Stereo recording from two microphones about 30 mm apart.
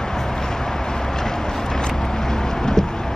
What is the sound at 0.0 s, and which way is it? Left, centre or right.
Vehicle, centre.